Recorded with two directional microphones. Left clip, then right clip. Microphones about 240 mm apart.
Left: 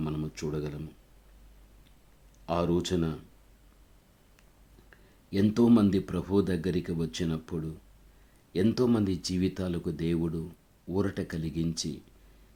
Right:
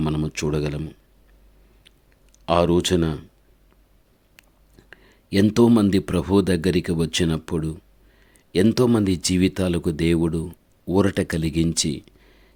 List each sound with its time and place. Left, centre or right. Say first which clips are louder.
0.0 s speech: right 10 dB; right
2.5 s speech: right 10 dB; right
4.9 s speech: right 10 dB; right